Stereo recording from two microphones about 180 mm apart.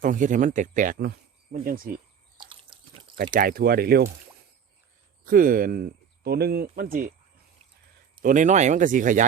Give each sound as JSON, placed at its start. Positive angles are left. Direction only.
{"t": 0.0, "sound": "speech", "side_deg": -45}
{"t": 2.4, "sound": "drip", "side_deg": -30}
{"t": 3.3, "sound": "speech", "side_deg": -55}
{"t": 5.2, "sound": "speech", "side_deg": -50}
{"t": 8.2, "sound": "speech", "side_deg": -45}